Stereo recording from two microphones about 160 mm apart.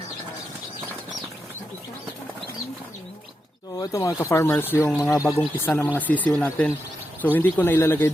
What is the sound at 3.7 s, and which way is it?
Speech, 20° left (ahead or behind).